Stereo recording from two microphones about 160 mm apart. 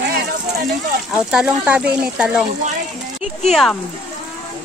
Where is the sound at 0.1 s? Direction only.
75° right (ahead or behind).